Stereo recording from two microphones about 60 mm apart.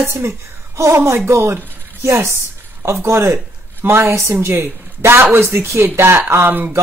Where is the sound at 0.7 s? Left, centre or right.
Right.